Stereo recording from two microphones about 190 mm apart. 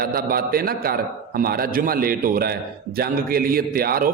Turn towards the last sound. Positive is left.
turn(degrees=-50)  # may be behind; listen again after turning